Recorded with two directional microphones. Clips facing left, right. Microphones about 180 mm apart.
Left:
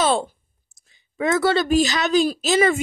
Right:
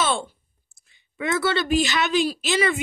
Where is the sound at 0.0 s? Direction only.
40° left (ahead or behind).